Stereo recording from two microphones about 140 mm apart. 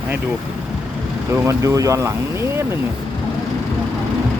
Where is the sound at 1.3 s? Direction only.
20° right (ahead or behind).